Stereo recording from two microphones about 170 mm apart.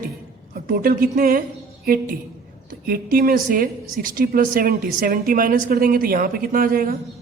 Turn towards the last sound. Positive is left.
turn(degrees=-60)  # may be behind; listen again after turning